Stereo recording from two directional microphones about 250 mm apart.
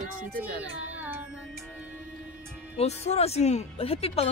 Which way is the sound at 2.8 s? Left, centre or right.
Left.